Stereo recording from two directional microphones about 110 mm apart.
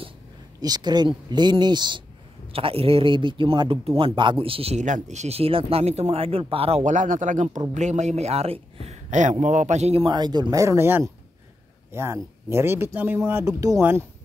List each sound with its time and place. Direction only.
0.6 s speech: 40° right (ahead or behind)
2.5 s a man's voice: 60° right (ahead or behind); by 10.0 s 85° right
10.0 s speech: 40° right (ahead or behind)
10.6 s speech: 25° right (ahead or behind)
13.5 s speech: 35° right (ahead or behind)
13.7 s speech: 20° right (ahead or behind)